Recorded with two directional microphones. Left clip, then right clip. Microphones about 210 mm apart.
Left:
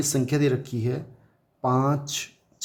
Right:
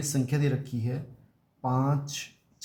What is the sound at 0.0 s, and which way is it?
Speech, 35° left (ahead or behind).